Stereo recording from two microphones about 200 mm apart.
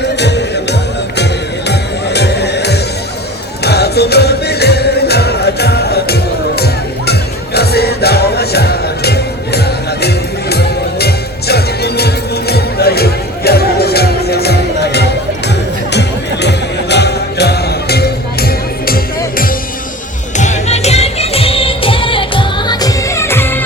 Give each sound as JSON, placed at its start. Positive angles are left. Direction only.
{"t": 0.2, "sound": "music", "side_deg": 55}
{"t": 20.3, "sound": "music", "side_deg": 35}